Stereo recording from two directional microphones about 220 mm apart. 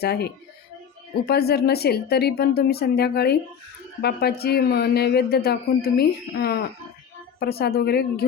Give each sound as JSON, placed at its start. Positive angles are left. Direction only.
{"t": 0.0, "sound": "speech", "side_deg": 45}